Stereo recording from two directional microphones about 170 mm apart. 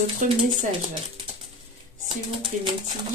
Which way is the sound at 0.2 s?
50° right (ahead or behind).